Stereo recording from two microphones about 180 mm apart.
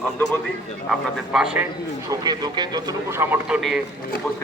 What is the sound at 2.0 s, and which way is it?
A man's voice, 20° right (ahead or behind).